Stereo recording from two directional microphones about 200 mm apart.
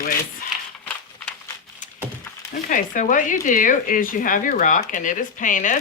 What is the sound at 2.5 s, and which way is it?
Speech, 40° left (ahead or behind).